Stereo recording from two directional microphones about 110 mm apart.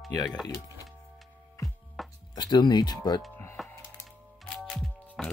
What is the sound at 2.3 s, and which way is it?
Speech, 40° left (ahead or behind).